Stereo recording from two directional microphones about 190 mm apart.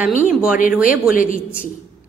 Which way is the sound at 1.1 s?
45° left (ahead or behind).